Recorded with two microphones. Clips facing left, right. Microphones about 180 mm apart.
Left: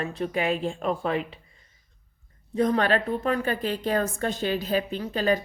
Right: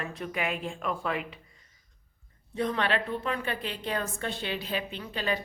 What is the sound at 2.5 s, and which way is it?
A woman's voice, 40° left (ahead or behind).